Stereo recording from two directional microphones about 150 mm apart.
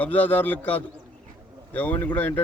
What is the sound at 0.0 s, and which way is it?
Speech, 10° left (ahead or behind).